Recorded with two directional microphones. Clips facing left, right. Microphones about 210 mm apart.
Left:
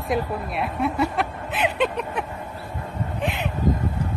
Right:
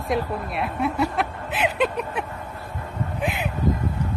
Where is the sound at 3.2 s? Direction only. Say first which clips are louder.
Even; 5° right (ahead or behind).